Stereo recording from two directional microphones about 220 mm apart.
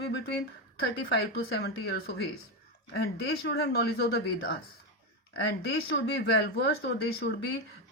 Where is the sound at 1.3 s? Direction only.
45° left (ahead or behind).